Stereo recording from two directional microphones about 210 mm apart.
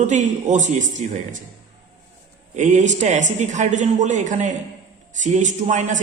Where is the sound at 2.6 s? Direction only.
35° right (ahead or behind).